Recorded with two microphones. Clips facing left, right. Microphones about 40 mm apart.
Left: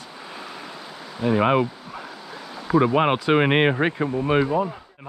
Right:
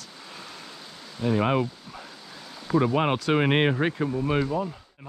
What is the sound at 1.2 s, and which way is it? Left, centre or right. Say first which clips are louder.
Speech: left 4 dB; centre.